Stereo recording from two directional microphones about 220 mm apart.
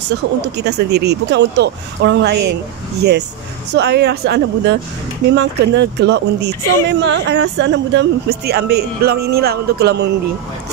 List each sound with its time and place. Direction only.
0.1 s speech: 50° right (ahead or behind)